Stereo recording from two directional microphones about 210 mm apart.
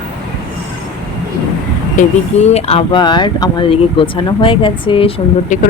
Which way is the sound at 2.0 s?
30° left (ahead or behind).